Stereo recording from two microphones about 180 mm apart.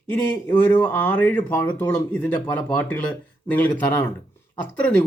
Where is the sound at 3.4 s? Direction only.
10° left (ahead or behind).